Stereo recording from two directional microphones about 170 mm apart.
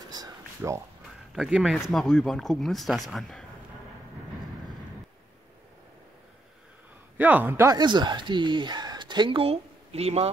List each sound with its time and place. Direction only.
0.1 s a sound: 20° right (ahead or behind)
1.3 s speech: centre (ahead or behind)
7.2 s speech: 10° right (ahead or behind); by 10.3 s 35° right (ahead or behind)